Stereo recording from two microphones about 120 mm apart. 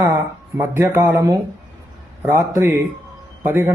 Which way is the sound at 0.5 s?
20° right (ahead or behind).